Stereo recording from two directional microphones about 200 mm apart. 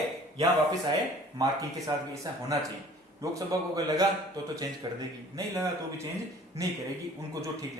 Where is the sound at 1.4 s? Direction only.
15° right (ahead or behind).